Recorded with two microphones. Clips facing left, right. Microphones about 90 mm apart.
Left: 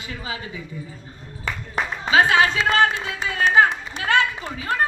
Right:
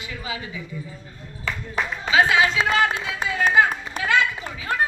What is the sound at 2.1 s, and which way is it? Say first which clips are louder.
Speech: left 1 dB; 45° left (ahead or behind).